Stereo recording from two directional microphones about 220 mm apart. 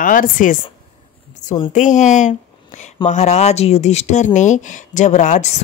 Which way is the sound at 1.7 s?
35° left (ahead or behind).